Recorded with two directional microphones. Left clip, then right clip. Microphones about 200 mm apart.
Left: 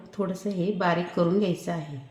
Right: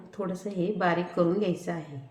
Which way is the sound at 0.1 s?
40° left (ahead or behind).